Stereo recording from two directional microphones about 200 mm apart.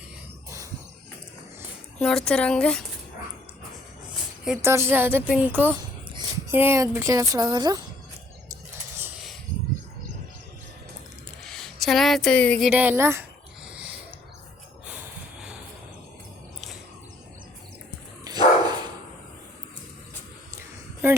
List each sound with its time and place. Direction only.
2.0 s speech: 5° left (ahead or behind)
4.4 s a woman's voice: 10° right (ahead or behind)
11.4 s speech: 5° left (ahead or behind)
12.7 s a woman's voice: 10° right (ahead or behind)
13.7 s snort: 5° right (ahead or behind)
18.3 s dog: 20° right (ahead or behind)
21.0 s a sound: 10° right (ahead or behind)